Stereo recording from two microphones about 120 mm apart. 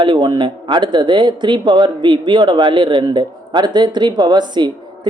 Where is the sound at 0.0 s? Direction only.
40° right (ahead or behind).